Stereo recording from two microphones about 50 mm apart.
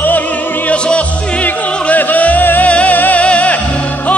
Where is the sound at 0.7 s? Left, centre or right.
Left.